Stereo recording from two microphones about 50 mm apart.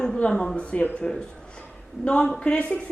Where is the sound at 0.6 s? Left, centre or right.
Left.